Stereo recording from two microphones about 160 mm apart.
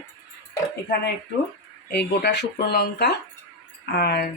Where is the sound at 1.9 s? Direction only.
90° left.